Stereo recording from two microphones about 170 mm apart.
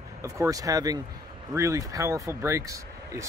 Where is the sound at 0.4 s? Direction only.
20° right (ahead or behind).